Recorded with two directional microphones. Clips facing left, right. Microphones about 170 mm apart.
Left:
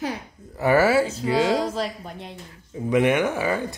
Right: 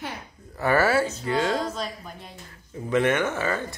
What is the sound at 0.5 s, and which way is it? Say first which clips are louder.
Speech: left 3 dB; 15° left (ahead or behind).